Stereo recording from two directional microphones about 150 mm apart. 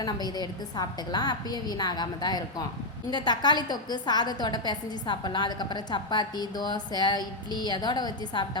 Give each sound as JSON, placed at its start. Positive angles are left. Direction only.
{"t": 0.0, "sound": "a woman's voice", "side_deg": 25}